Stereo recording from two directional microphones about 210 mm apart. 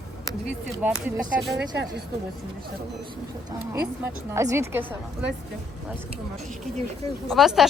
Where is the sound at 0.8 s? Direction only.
5° right (ahead or behind).